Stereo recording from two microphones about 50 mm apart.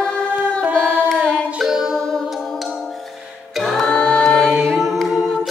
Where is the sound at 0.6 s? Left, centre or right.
Right.